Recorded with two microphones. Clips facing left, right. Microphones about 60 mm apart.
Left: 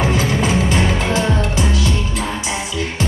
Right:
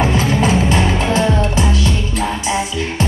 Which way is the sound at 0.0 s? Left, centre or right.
Right.